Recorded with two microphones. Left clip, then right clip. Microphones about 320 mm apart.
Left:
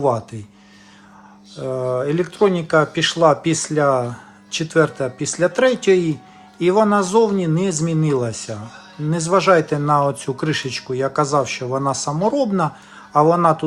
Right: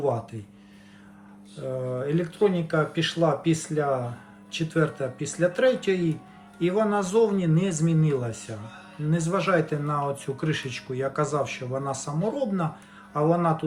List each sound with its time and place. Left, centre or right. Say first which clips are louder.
1.7 s speech: left 8 dB; centre